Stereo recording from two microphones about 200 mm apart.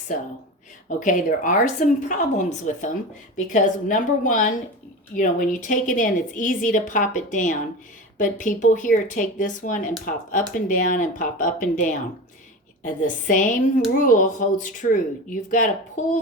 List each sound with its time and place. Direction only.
0.9 s speech: 40° left (ahead or behind)